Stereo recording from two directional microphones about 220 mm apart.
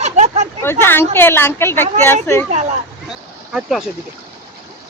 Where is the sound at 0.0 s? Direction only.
30° right (ahead or behind).